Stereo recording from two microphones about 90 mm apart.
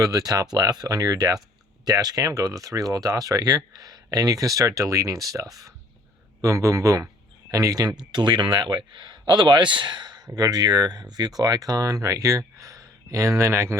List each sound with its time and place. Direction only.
0.0 s speech: 45° right (ahead or behind)